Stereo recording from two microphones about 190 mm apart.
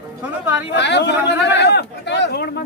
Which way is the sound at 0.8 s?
65° left (ahead or behind).